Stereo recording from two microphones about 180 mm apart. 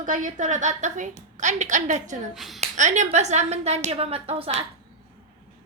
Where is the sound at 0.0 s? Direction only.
45° right (ahead or behind).